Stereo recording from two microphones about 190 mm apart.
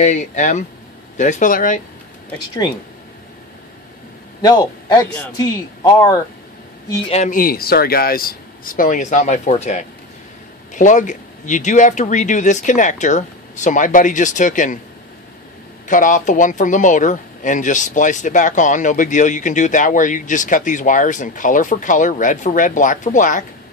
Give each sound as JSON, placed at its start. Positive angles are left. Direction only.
{"t": 0.0, "sound": "speech", "side_deg": 40}
{"t": 4.4, "sound": "a man's voice", "side_deg": 20}
{"t": 7.1, "sound": "speech", "side_deg": 40}
{"t": 15.9, "sound": "speech", "side_deg": 40}